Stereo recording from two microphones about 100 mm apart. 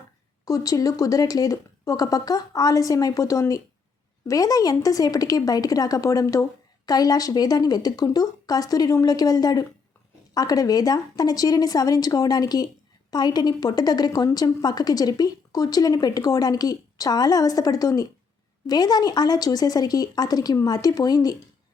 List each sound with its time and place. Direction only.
0.4 s a woman's voice: 35° left (ahead or behind)